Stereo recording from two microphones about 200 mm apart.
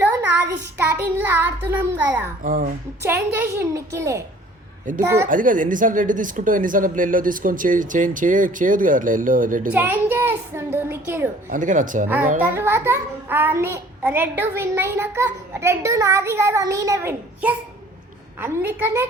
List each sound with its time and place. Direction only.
0.0 s child singing: 10° right (ahead or behind)
2.4 s a woman's voice: 45° right (ahead or behind)
3.0 s a child's voice: 10° right (ahead or behind)
4.9 s speech: 40° right (ahead or behind)
9.7 s a child's voice: 10° right (ahead or behind)
11.4 s speech: 40° right (ahead or behind)
12.4 s a child's voice: 10° right (ahead or behind)